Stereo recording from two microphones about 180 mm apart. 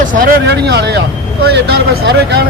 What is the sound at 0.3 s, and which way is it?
Speech, 65° right (ahead or behind).